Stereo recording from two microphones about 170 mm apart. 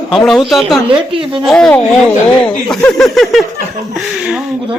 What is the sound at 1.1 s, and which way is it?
Speech, 30° right (ahead or behind).